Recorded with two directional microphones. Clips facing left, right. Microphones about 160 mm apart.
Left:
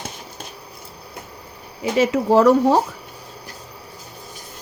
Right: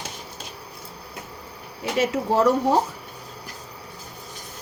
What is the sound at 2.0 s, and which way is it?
Speech, 90° left.